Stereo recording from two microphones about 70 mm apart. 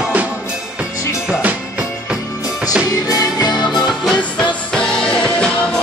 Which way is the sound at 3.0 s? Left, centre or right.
Left.